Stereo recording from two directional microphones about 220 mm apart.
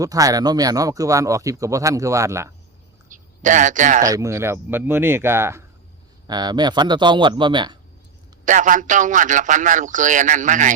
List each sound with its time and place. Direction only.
0.0 s speech: 15° right (ahead or behind)
3.1 s speech: 35° right (ahead or behind)
4.0 s speech: 15° right (ahead or behind)
8.4 s a man's voice: 35° right (ahead or behind)